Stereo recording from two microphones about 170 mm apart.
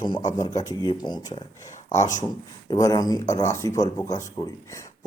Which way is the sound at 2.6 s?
20° left (ahead or behind).